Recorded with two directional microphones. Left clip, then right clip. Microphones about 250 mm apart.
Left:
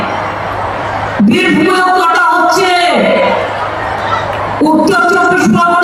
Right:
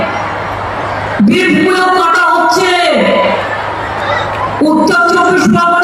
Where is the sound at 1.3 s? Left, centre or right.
Centre.